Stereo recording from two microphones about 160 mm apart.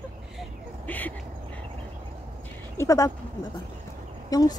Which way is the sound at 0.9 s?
10° left (ahead or behind).